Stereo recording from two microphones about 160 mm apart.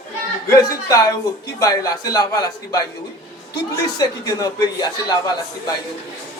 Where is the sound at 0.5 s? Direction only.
20° left (ahead or behind).